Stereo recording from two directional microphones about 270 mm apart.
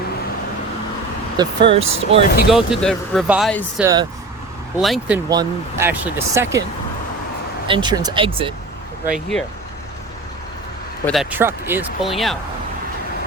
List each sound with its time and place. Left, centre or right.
1.4 s speech: centre
2.5 s speech: centre
3.8 s speech: centre
7.7 s speech: centre
9.0 s speech: centre
11.0 s speech: centre